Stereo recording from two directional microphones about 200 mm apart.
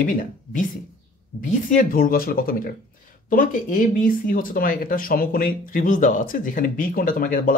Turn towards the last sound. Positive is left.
turn(degrees=45)  # may be behind; listen again after turning